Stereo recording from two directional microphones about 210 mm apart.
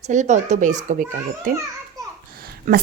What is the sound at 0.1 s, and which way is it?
Speech, 35° right (ahead or behind).